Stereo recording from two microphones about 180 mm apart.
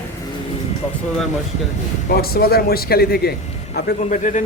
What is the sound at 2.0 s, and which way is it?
Speech, 60° left (ahead or behind).